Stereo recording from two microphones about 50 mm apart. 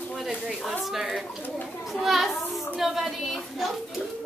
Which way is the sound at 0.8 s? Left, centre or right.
Centre.